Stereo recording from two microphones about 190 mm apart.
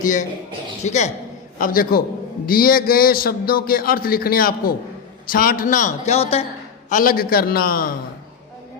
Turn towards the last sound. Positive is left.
turn(degrees=50)  # may be behind; listen again after turning